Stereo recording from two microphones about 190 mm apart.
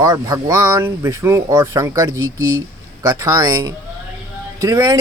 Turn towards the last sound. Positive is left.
turn(degrees=-20)  # may be behind; listen again after turning